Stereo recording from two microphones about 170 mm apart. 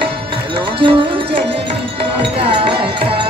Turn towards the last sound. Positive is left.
turn(degrees=-30)  # may be behind; listen again after turning